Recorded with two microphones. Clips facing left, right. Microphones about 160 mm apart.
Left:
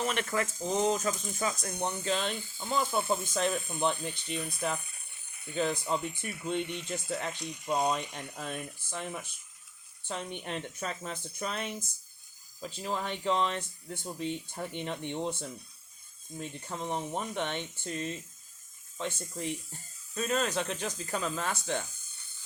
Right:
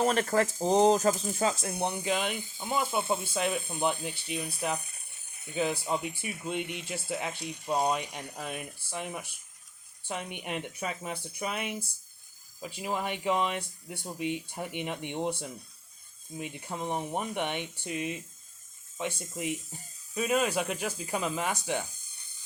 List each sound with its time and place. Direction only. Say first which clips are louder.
0.0 s speech: right 6 dB; 35° right (ahead or behind)
1.7 s speech: right 2 dB; 10° right (ahead or behind)
3.3 s speech: even; 5° right (ahead or behind)
5.5 s speech: right 1 dB; 10° right (ahead or behind)